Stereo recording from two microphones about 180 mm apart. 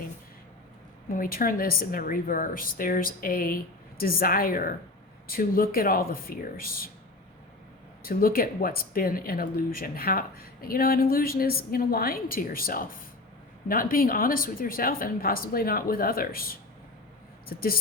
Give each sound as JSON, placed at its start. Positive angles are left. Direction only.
{"t": 1.0, "sound": "speech", "side_deg": 50}
{"t": 8.0, "sound": "speech", "side_deg": 55}